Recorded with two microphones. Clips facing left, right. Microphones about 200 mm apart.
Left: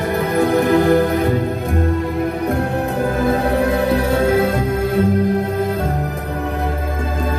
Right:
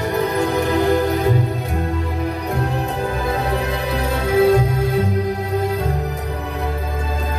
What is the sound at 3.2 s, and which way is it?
Music, 50° left (ahead or behind).